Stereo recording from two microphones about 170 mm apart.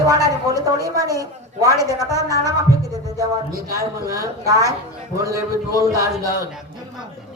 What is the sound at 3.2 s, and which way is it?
A woman's voice, 20° right (ahead or behind).